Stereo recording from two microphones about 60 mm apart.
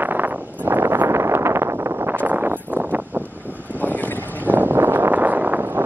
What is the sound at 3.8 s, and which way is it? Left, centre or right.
Boat, left.